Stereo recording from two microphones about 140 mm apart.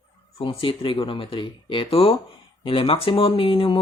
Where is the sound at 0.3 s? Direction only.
40° left (ahead or behind).